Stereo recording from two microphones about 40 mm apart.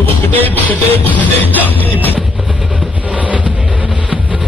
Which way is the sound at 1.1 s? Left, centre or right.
Left.